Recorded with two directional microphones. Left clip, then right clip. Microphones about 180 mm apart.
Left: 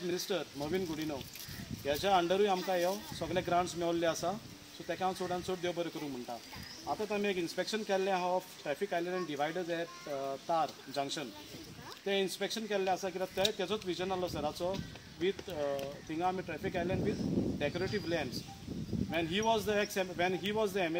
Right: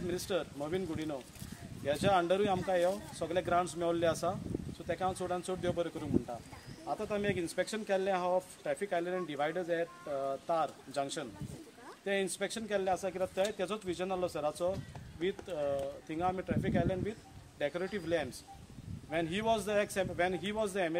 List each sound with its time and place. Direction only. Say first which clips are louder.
0.1 s speech: right 1 dB; 15° right (ahead or behind)
7.1 s speech: right 1 dB; 15° right (ahead or behind)